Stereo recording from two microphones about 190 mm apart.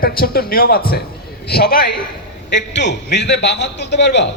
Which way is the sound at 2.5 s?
65° left (ahead or behind).